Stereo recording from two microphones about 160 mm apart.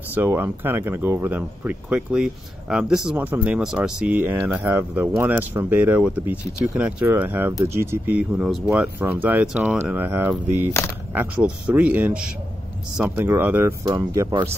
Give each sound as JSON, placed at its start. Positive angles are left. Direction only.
{"t": 0.1, "sound": "speech", "side_deg": -15}